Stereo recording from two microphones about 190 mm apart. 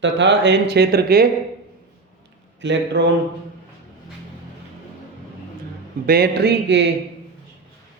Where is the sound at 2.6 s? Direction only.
70° right (ahead or behind).